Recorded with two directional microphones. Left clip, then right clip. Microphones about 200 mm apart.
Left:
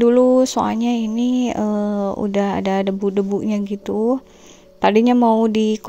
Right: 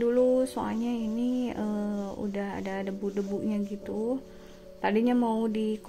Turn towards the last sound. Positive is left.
turn(degrees=40)  # may be behind; listen again after turning